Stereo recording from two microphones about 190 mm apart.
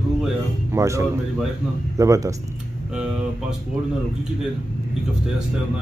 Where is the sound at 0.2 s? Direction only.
15° right (ahead or behind).